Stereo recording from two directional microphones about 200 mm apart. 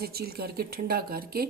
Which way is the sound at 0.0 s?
50° right (ahead or behind).